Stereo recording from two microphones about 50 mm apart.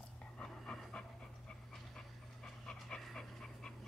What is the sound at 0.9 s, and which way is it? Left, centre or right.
Dog, centre.